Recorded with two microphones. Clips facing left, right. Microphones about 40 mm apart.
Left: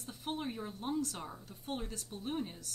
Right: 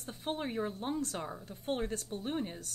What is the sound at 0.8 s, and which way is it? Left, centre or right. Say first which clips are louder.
Speech: right 1 dB; right.